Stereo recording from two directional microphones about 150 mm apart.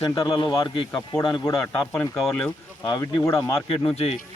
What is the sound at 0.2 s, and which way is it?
A man's voice, 35° left (ahead or behind).